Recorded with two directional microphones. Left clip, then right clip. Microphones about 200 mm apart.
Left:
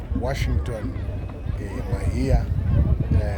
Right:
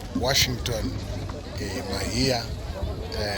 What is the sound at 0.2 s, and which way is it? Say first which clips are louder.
Speech: right 6 dB; 10° left (ahead or behind).